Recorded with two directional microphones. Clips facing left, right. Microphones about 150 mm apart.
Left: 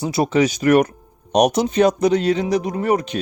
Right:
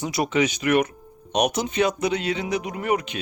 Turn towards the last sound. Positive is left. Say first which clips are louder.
# left 5 dB
turn(degrees=35)  # may be behind; listen again after turning